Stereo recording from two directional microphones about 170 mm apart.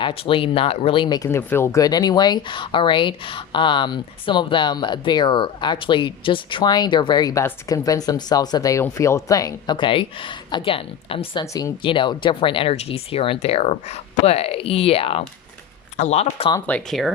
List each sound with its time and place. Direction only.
0.0 s speech: 30° left (ahead or behind)
11.4 s speech: 20° left (ahead or behind)
16.6 s speech: 10° left (ahead or behind)